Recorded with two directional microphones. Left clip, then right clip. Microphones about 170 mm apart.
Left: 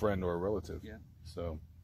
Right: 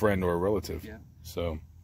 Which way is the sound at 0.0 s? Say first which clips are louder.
Right 7 dB; 35° right (ahead or behind).